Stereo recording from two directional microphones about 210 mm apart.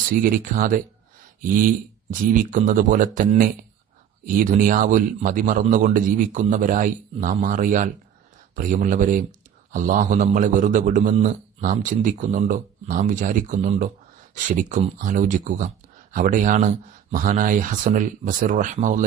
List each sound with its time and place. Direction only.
0.2 s a man's voice: 40° right (ahead or behind)
2.2 s a man's voice: 40° right (ahead or behind)